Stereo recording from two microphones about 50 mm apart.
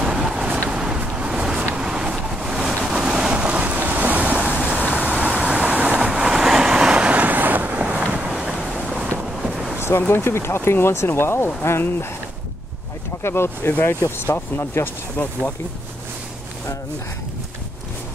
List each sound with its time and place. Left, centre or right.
0.1 s vehicle: centre
3.4 s waves: right
7.1 s boat: right; by 8.7 s centre
8.8 s a sound: centre
9.8 s a sound: left
10.0 s speech: left
13.2 s speech: left